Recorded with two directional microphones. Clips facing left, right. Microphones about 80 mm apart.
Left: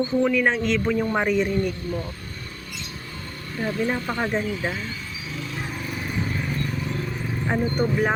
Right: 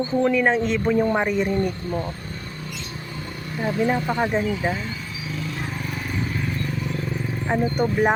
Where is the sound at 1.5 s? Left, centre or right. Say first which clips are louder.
Right 1 dB; right.